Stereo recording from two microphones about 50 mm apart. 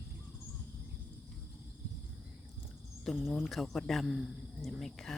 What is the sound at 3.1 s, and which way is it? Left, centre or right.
Speech, centre.